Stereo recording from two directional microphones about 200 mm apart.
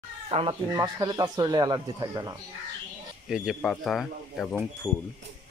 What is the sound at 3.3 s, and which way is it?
Speech, centre (ahead or behind).